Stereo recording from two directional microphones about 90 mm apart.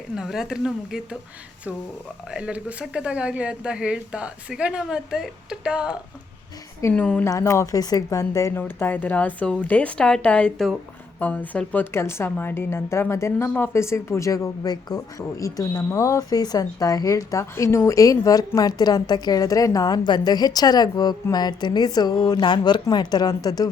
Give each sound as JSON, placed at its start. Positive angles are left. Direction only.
{"t": 0.2, "sound": "speech", "side_deg": -5}
{"t": 2.3, "sound": "a woman's voice", "side_deg": -15}
{"t": 6.9, "sound": "a woman's voice", "side_deg": 15}
{"t": 7.3, "sound": "a woman's voice", "side_deg": 35}
{"t": 8.5, "sound": "a woman's voice", "side_deg": 20}
{"t": 14.9, "sound": "a woman's voice", "side_deg": 35}